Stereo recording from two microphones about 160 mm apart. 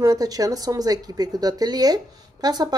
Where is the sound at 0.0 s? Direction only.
25° right (ahead or behind).